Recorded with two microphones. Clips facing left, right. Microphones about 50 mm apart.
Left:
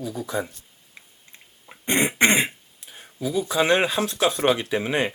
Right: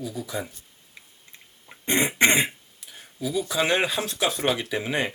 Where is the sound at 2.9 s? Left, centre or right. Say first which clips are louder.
Left 2 dB; centre.